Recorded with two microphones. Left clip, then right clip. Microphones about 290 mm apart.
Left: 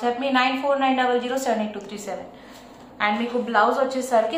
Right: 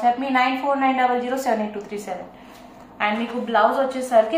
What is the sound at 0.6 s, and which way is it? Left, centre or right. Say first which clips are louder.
A woman's voice: right 1 dB; centre.